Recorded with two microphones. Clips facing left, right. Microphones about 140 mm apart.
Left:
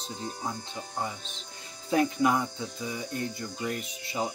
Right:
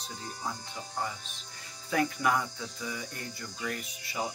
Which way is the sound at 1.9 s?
20° left (ahead or behind).